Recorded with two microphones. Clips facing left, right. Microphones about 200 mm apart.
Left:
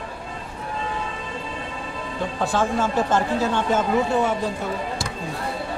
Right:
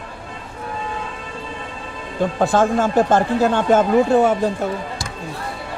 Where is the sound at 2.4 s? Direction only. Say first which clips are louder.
Right 5 dB; 50° right (ahead or behind).